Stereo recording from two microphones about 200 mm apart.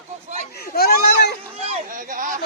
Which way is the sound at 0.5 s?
50° left (ahead or behind).